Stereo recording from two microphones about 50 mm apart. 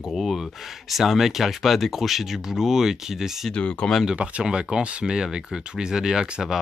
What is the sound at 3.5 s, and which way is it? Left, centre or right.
Speech, left.